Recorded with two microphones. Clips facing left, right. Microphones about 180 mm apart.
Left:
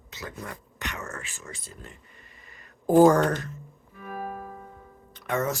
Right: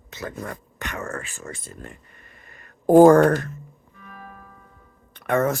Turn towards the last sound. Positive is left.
turn(degrees=-55)  # may be behind; listen again after turning